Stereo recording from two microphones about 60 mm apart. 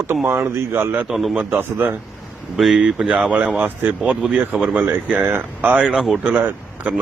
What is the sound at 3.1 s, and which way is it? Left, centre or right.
Speech, right.